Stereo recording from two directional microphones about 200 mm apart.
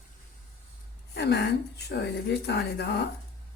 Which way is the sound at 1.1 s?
55° left (ahead or behind).